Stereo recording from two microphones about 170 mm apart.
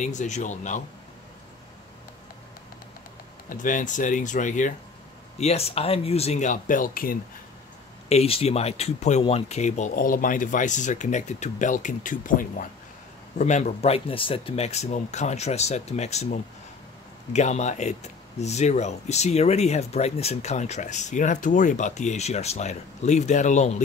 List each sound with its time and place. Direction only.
0.0 s speech: 45° left (ahead or behind)
3.4 s speech: 50° left (ahead or behind)
5.4 s speech: 35° left (ahead or behind); by 7.2 s 55° left (ahead or behind)
8.1 s speech: 35° left (ahead or behind)